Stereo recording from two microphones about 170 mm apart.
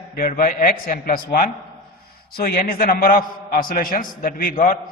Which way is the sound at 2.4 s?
60° left (ahead or behind).